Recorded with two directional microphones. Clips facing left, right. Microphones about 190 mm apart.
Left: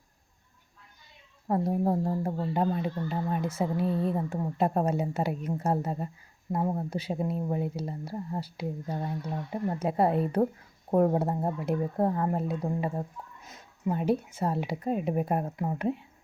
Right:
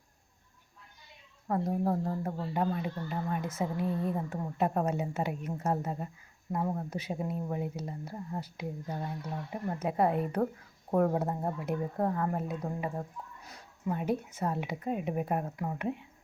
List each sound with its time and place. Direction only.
1.5 s speech: 30° left (ahead or behind)